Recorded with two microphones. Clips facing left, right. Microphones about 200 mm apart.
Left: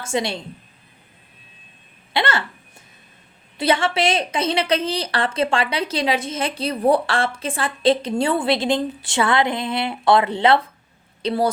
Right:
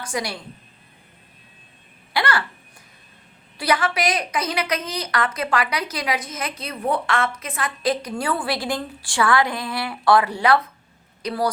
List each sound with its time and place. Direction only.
0.0 s a woman's voice: 25° left (ahead or behind)
2.1 s a sound: 25° left (ahead or behind)
3.6 s a woman's voice: 25° left (ahead or behind)